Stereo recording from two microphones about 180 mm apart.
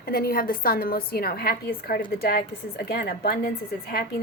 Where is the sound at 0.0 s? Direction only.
55° left (ahead or behind).